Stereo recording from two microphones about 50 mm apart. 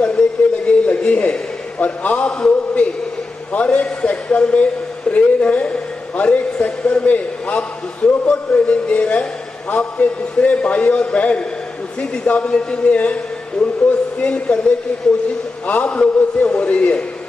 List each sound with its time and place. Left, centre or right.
0.7 s a man's voice: left
15.6 s a man's voice: left